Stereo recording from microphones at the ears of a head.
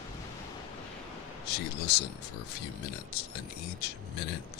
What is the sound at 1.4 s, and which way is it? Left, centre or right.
Speech, left.